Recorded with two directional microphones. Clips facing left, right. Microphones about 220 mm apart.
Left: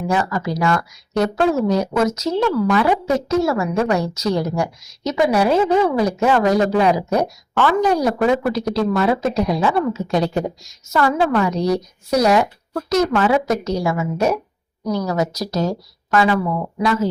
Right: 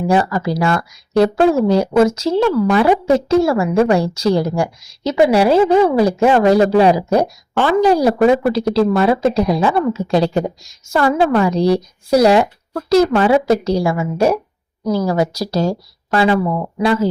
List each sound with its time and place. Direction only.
0.1 s speech: 30° right (ahead or behind)